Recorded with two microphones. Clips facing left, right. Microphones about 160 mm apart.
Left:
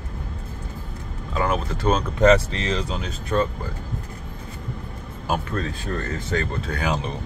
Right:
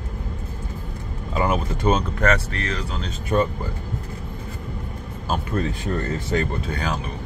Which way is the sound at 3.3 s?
15° right (ahead or behind).